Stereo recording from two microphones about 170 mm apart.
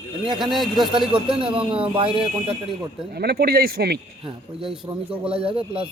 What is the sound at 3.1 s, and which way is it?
Speech, 70° right (ahead or behind).